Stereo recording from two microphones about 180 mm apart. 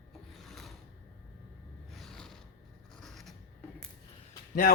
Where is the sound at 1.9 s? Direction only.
Centre (ahead or behind).